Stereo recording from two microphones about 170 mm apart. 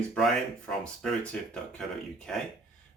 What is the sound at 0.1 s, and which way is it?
Speech, 5° left (ahead or behind).